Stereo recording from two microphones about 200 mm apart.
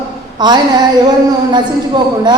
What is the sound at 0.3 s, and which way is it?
Speech, 20° right (ahead or behind).